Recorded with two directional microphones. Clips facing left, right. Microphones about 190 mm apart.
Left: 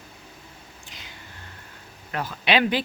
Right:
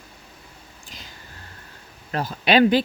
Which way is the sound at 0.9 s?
40° right (ahead or behind).